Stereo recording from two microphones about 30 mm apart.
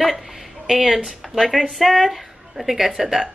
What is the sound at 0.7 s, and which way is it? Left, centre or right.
Speech, centre.